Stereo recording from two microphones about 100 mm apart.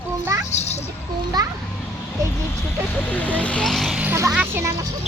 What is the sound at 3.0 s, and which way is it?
Speech, 15° left (ahead or behind).